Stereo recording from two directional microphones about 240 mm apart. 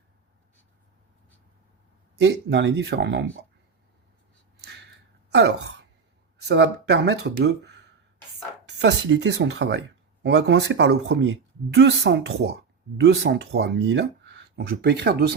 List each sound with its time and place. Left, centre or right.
2.2 s speech: right
5.3 s speech: right